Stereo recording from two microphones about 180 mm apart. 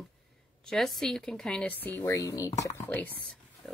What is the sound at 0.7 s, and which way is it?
Speech, centre (ahead or behind).